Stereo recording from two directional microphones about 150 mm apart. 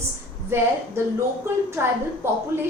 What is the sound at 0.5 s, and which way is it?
Speech, 15° right (ahead or behind).